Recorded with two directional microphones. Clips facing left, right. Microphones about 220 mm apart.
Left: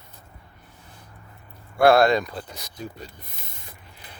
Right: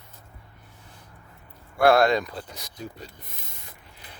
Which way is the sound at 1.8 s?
35° left (ahead or behind).